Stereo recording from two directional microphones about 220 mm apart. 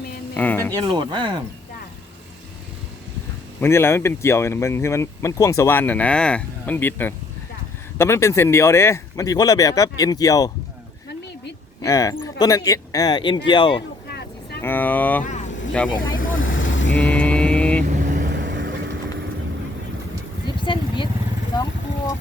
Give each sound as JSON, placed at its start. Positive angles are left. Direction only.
{"t": 0.3, "sound": "speech", "side_deg": 10}
{"t": 0.9, "sound": "speech", "side_deg": -20}
{"t": 3.6, "sound": "speech", "side_deg": 10}
{"t": 11.8, "sound": "speech", "side_deg": 15}
{"t": 14.1, "sound": "vehicle", "side_deg": 45}
{"t": 14.6, "sound": "speech", "side_deg": 10}
{"t": 15.2, "sound": "vehicle", "side_deg": 35}
{"t": 16.0, "sound": "speech", "side_deg": 60}
{"t": 16.4, "sound": "vehicle", "side_deg": 60}
{"t": 16.9, "sound": "mantra", "side_deg": 5}
{"t": 18.1, "sound": "vehicle", "side_deg": -45}
{"t": 20.7, "sound": "vehicle", "side_deg": 20}